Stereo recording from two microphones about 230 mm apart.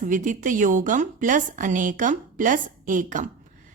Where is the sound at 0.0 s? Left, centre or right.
Right.